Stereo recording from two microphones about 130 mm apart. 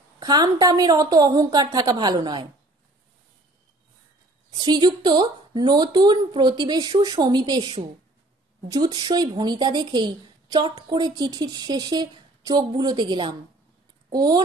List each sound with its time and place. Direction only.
0.2 s a woman's voice: 30° right (ahead or behind)
4.6 s a woman's voice: 35° right (ahead or behind)
8.7 s a woman's voice: 35° right (ahead or behind)